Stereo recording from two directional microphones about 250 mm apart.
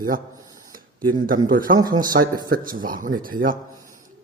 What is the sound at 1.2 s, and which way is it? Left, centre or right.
Speech, right.